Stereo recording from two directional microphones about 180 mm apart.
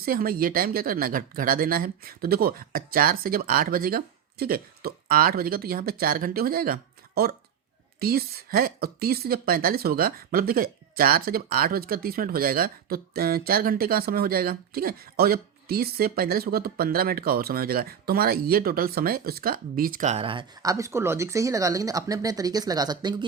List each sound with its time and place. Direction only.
0.0 s speech: 55° right (ahead or behind)
7.9 s a woman's voice: 55° right (ahead or behind); by 23.2 s 25° right (ahead or behind)